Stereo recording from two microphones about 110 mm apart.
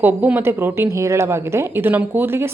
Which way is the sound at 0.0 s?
15° right (ahead or behind).